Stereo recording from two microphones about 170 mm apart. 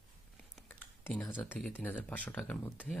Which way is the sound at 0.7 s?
10° left (ahead or behind).